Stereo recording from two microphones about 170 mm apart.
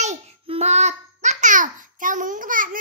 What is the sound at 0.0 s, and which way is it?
Babbling, 40° right (ahead or behind).